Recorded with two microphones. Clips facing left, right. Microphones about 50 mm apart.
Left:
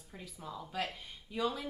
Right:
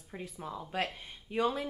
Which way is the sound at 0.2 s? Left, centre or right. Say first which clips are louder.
Right 3 dB; right.